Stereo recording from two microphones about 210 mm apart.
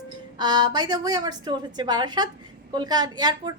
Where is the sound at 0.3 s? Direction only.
20° right (ahead or behind).